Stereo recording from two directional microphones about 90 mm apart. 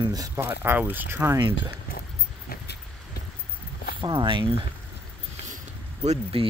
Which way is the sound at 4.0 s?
65° right (ahead or behind).